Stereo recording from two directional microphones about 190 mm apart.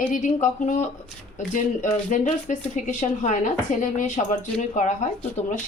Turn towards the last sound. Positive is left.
turn(degrees=40)  # may be behind; listen again after turning